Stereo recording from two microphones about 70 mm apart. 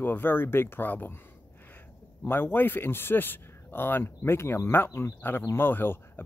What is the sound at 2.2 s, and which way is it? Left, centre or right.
Speech, left.